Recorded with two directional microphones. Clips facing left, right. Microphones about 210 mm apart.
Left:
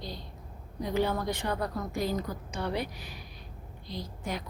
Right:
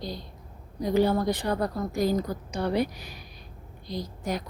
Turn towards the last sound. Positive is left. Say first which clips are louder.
# right 5 dB
turn(degrees=-40)  # may be behind; listen again after turning